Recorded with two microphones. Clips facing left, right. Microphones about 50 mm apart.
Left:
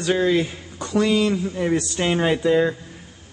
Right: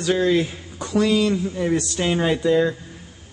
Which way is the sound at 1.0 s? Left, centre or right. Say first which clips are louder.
Even; centre.